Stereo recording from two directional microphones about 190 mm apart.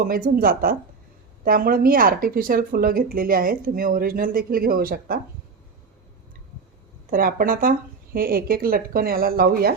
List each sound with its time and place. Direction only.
0.0 s speech: 50° right (ahead or behind)
7.1 s speech: 50° right (ahead or behind)